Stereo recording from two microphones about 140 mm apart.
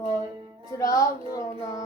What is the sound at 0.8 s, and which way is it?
Music, 25° left (ahead or behind).